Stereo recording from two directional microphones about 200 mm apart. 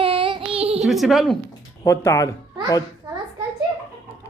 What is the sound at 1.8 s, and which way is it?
Speech, 15° left (ahead or behind).